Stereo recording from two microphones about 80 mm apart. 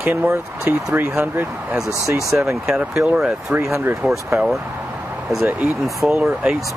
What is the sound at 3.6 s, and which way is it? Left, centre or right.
Speech, right.